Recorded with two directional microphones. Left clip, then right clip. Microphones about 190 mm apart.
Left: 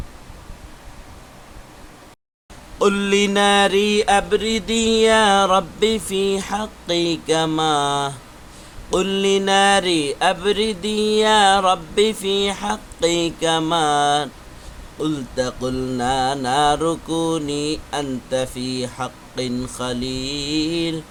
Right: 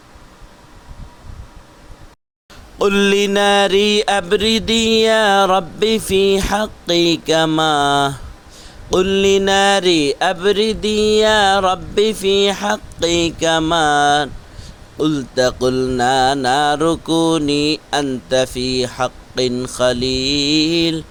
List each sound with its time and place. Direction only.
2.7 s mantra: 35° right (ahead or behind)